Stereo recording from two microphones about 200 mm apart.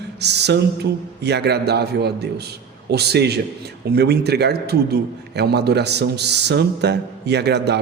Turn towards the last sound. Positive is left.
turn(degrees=-55)  # may be behind; listen again after turning